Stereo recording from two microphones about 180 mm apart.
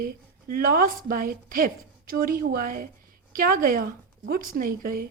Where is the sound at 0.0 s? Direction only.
55° right (ahead or behind).